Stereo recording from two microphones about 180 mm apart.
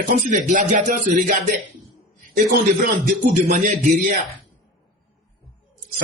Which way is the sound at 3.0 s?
45° right (ahead or behind).